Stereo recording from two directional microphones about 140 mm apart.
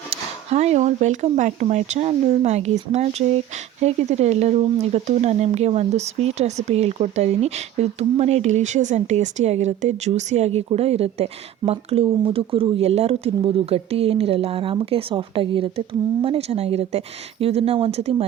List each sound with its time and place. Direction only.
0.1 s speech: 50° right (ahead or behind)